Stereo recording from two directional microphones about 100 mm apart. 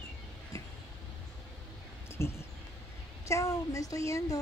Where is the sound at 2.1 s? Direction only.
25° left (ahead or behind).